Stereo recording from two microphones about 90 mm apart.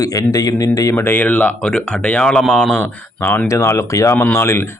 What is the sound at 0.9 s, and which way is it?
Speech, 20° left (ahead or behind).